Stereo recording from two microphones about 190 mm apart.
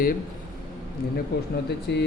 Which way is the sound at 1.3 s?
55° left (ahead or behind).